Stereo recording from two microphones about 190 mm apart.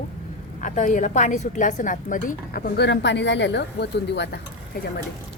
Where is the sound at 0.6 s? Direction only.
40° left (ahead or behind); by 4.4 s 60° left (ahead or behind).